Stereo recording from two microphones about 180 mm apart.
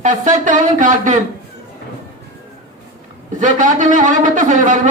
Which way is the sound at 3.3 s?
45° right (ahead or behind).